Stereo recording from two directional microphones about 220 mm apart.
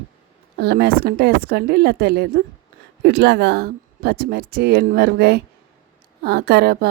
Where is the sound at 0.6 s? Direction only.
45° right (ahead or behind).